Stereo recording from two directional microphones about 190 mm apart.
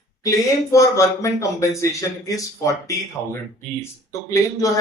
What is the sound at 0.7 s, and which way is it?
Speech, 15° left (ahead or behind).